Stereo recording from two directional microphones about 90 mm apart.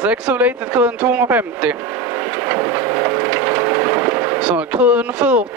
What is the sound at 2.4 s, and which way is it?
Wood, 20° right (ahead or behind).